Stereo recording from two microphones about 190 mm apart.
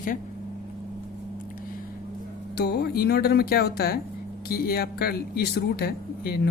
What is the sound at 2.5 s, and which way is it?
Speech, 55° left (ahead or behind).